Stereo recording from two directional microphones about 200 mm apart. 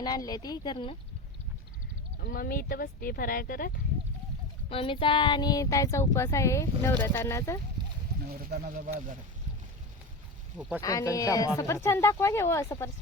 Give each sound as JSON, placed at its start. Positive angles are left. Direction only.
{"t": 0.0, "sound": "speech", "side_deg": 20}
{"t": 2.2, "sound": "speech", "side_deg": 45}
{"t": 4.7, "sound": "child singing", "side_deg": 25}
{"t": 8.3, "sound": "speech", "side_deg": -50}
{"t": 10.8, "sound": "child singing", "side_deg": 15}